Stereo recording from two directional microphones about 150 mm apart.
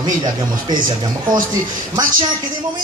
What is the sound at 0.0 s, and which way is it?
Speech, 30° right (ahead or behind).